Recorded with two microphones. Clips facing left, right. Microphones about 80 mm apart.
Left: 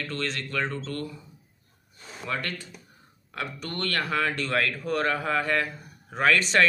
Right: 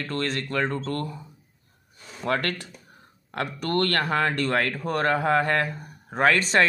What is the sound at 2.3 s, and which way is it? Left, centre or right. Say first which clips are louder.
Speech: right 6 dB; right.